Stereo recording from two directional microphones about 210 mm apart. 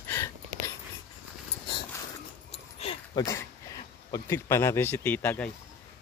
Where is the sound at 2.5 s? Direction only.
25° left (ahead or behind).